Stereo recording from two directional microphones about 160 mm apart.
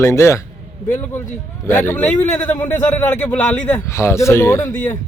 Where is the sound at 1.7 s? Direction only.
15° left (ahead or behind).